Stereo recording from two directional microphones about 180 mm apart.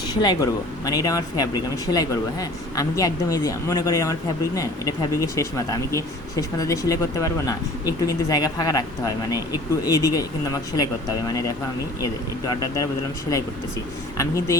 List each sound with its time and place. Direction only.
0.1 s speech: 20° left (ahead or behind)
14.2 s speech: 15° left (ahead or behind)